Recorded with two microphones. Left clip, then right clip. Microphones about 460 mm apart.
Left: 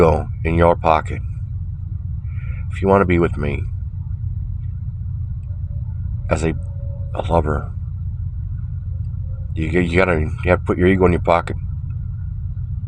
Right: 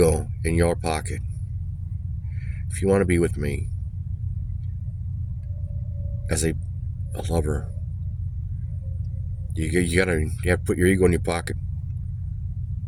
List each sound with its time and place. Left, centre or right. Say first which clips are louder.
0.0 s speech: left 6 dB; right
2.7 s speech: left 6 dB; right
6.2 s speech: left 6 dB; right
9.6 s speech: left 5 dB; right